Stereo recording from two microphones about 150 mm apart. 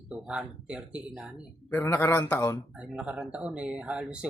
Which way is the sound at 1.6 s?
15° left (ahead or behind).